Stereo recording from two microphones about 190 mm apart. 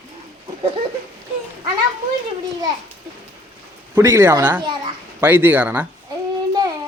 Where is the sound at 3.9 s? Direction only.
15° right (ahead or behind).